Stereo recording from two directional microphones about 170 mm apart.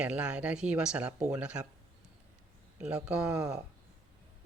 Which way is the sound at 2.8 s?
5° right (ahead or behind).